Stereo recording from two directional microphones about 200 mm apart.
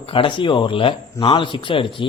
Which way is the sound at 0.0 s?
25° left (ahead or behind).